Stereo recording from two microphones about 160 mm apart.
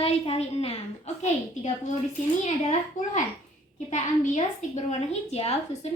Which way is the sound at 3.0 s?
50° left (ahead or behind).